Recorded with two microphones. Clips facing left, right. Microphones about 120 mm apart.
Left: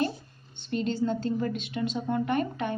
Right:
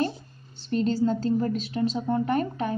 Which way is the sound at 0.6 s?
40° right (ahead or behind).